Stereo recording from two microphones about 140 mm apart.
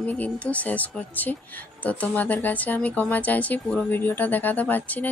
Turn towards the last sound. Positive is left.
turn(degrees=10)  # may be behind; listen again after turning